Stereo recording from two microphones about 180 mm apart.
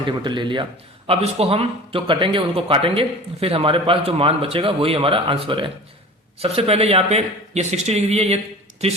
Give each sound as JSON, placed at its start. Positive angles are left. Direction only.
{"t": 0.2, "sound": "a man's voice", "side_deg": -25}